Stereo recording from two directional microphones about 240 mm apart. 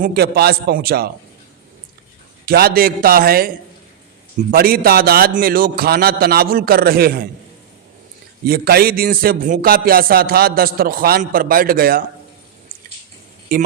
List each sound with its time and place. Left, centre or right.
0.0 s a man's voice: right
2.5 s a man's voice: right
4.5 s a man's voice: right
8.4 s a man's voice: right